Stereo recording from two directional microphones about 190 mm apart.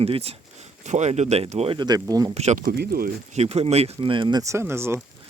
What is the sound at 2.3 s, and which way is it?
Speech, 35° right (ahead or behind).